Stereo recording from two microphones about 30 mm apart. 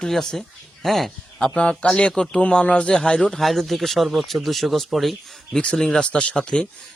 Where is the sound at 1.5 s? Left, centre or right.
Left.